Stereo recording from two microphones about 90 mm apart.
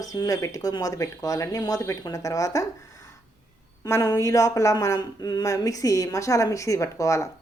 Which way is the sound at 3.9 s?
40° left (ahead or behind).